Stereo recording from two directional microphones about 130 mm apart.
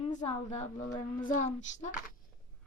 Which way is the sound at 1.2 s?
85° left.